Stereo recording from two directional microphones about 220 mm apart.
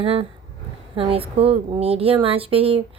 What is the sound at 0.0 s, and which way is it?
Speech, 25° right (ahead or behind).